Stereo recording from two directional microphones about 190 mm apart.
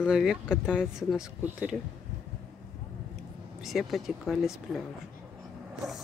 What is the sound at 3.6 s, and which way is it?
Speech, centre (ahead or behind).